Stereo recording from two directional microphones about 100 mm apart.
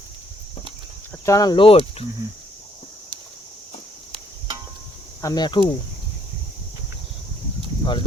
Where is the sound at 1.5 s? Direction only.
65° left (ahead or behind).